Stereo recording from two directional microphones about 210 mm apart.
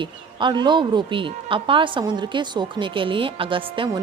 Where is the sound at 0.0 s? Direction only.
20° right (ahead or behind).